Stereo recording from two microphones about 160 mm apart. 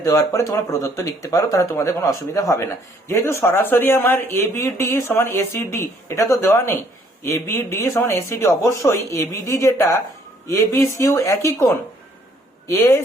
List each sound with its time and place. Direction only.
0.0 s speech: 20° left (ahead or behind)